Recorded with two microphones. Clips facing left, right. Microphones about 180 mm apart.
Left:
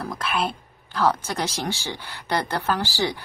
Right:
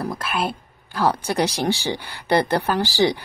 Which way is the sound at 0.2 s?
5° right (ahead or behind).